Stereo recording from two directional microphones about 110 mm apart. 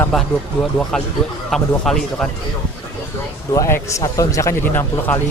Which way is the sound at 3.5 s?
25° left (ahead or behind).